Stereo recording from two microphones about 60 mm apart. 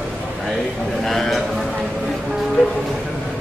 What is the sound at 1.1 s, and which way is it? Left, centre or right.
Speech, centre.